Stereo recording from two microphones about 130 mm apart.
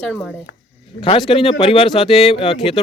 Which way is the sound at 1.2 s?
45° left (ahead or behind).